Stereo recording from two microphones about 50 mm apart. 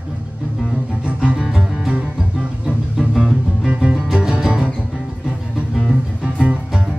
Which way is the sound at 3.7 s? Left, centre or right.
Right.